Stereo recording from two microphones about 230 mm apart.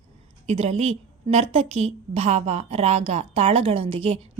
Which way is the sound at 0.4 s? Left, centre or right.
Right.